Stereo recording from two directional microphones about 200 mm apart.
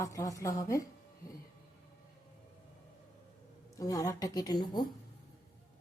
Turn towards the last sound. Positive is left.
turn(degrees=20)  # may be behind; listen again after turning